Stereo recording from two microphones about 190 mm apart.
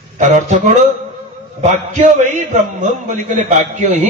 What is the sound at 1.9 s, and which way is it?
A man's voice, 40° right (ahead or behind).